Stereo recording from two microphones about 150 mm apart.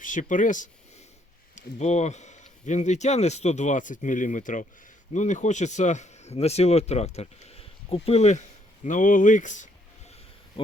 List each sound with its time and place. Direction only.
0.0 s speech: 60° left (ahead or behind)